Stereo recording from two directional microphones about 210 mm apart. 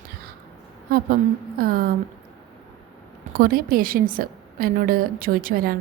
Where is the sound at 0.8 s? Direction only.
45° right (ahead or behind).